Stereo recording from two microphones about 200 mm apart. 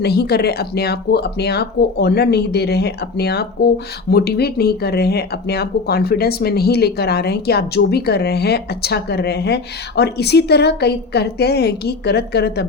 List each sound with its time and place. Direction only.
0.0 s speech: 50° left (ahead or behind)